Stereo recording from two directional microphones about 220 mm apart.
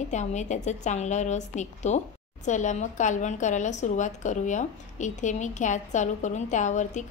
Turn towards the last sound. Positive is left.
turn(degrees=35)  # may be behind; listen again after turning